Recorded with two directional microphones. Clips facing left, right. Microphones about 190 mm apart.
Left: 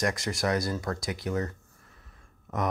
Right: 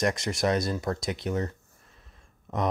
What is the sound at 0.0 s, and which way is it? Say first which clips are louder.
Speech: right 2 dB; 20° right (ahead or behind).